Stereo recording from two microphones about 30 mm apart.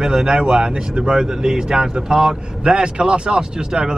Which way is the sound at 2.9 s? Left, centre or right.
Right.